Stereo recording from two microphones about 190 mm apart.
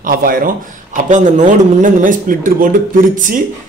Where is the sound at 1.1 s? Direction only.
40° right (ahead or behind).